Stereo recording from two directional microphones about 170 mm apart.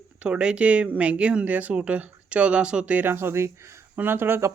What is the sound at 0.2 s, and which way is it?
Speech, 5° right (ahead or behind).